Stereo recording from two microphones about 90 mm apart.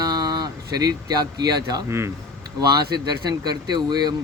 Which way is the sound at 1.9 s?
30° right (ahead or behind).